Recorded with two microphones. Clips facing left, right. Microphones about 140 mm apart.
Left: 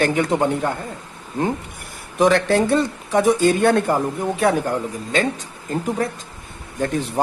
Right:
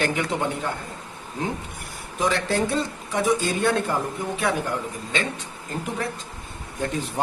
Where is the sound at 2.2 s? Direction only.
65° left (ahead or behind).